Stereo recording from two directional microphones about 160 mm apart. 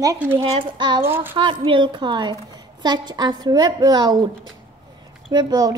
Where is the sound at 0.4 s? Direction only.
35° right (ahead or behind).